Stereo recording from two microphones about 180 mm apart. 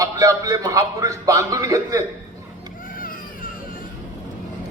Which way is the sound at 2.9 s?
50° left (ahead or behind).